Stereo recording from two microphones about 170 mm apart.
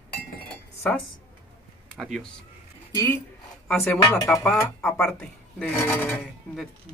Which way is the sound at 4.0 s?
20° left (ahead or behind).